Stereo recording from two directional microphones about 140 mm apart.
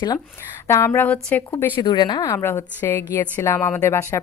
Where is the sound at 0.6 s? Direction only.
20° left (ahead or behind).